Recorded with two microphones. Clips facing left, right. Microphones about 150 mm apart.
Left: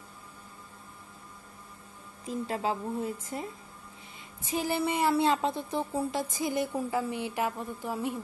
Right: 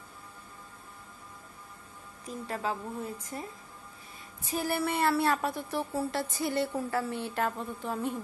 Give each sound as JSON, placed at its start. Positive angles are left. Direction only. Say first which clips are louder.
{"t": 2.2, "sound": "a woman's voice", "louder": "left 3 dB", "side_deg": 25}
{"t": 4.5, "sound": "speech", "louder": "left 1 dB", "side_deg": 20}